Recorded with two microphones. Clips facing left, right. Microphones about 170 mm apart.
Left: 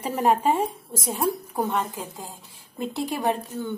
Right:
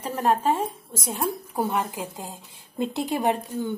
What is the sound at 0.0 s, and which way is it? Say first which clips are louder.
Speech: left 1 dB; 10° left (ahead or behind).